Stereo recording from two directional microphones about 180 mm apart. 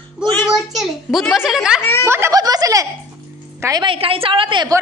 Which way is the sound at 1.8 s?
15° left (ahead or behind).